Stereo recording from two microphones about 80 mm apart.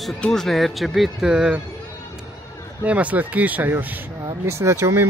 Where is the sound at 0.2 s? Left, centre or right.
Centre.